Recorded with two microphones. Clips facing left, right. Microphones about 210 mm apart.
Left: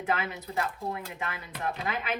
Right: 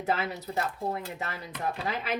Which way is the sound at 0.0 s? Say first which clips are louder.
Right 1 dB; 35° right (ahead or behind).